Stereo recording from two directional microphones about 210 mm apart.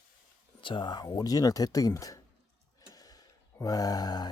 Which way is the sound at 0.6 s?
25° left (ahead or behind).